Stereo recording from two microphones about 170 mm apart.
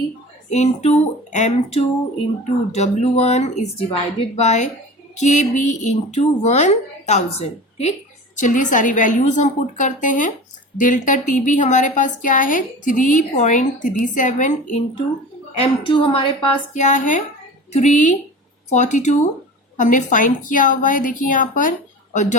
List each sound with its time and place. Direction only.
0.5 s a woman's voice: 40° left (ahead or behind)
15.5 s a woman's voice: 30° left (ahead or behind)
16.7 s a woman's voice: 45° left (ahead or behind)